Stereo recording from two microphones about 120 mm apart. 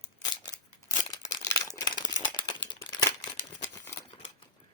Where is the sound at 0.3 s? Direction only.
30° left (ahead or behind).